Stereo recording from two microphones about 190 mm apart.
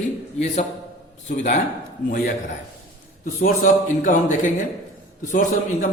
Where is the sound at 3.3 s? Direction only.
45° left (ahead or behind).